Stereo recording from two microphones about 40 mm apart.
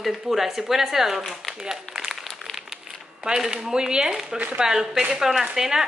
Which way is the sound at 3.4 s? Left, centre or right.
Centre.